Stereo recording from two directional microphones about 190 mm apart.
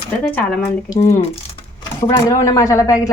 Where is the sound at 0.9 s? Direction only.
20° left (ahead or behind).